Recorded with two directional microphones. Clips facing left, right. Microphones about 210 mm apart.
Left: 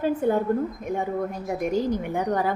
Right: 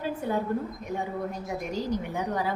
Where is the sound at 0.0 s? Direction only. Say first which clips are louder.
Left 8 dB; 50° left (ahead or behind).